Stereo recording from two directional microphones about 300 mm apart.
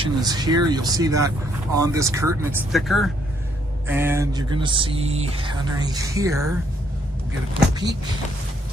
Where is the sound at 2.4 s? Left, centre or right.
Centre.